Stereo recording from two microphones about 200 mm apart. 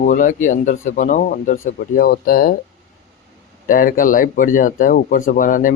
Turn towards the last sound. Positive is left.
turn(degrees=40)  # may be behind; listen again after turning